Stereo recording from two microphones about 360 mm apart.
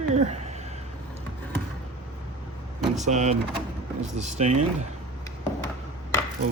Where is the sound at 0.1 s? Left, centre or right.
Centre.